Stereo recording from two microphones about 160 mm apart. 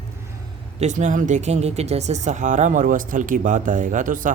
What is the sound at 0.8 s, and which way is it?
Speech, 50° right (ahead or behind).